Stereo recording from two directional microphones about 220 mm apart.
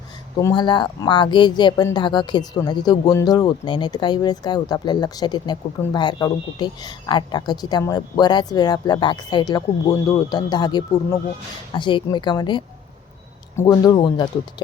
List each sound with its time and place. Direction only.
0.3 s speech: 20° left (ahead or behind)